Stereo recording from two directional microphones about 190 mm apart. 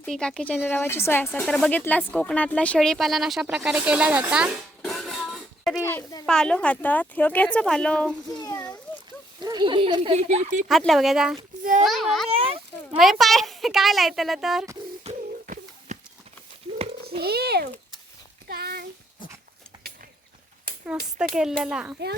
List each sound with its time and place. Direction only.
0.0 s speech: 5° left (ahead or behind)
5.8 s a child's voice: 15° left (ahead or behind)
6.2 s speech: 5° left (ahead or behind)
8.3 s a sound: 20° left (ahead or behind)
9.4 s speech: 20° right (ahead or behind); by 10.7 s 40° right (ahead or behind)
10.7 s speech: centre (ahead or behind)
11.6 s a child's voice: 40° right (ahead or behind)
11.9 s a child's voice: centre (ahead or behind)
12.3 s a sound: 30° right (ahead or behind)
13.0 s speech: centre (ahead or behind)
15.0 s a sound: 40° right (ahead or behind)
17.1 s a child's voice: 55° right (ahead or behind)
18.4 s a sound: 55° right (ahead or behind)
21.3 s speech: 5° right (ahead or behind)